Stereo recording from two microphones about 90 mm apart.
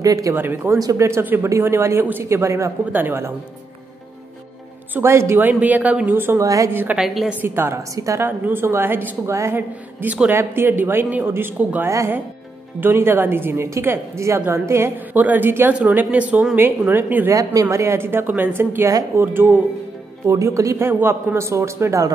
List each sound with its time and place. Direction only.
0.0 s speech: 40° right (ahead or behind)
0.3 s a woman's voice: 25° right (ahead or behind)
0.7 s a woman's voice: 40° right (ahead or behind)
4.9 s a woman's voice: 30° right (ahead or behind)
5.5 s speech: 15° right (ahead or behind)
6.4 s speech: 40° right (ahead or behind)
6.7 s a woman's voice: 20° right (ahead or behind)
7.0 s a woman's voice: 5° right (ahead or behind)
7.4 s a woman's voice: 25° right (ahead or behind)
7.9 s speech: 35° right (ahead or behind)
8.3 s a woman's voice: 25° right (ahead or behind)
15.1 s a woman's voice: 20° right (ahead or behind)
17.6 s a woman's voice: 30° right (ahead or behind)
20.2 s speech: 35° right (ahead or behind)